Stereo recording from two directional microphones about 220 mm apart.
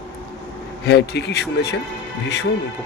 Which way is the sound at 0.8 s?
50° left (ahead or behind).